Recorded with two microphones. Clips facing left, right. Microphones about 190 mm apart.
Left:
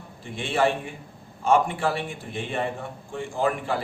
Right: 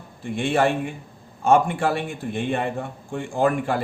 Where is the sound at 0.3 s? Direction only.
55° right (ahead or behind).